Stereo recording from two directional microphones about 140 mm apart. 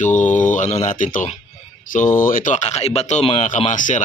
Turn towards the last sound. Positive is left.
turn(degrees=65)  # may be behind; listen again after turning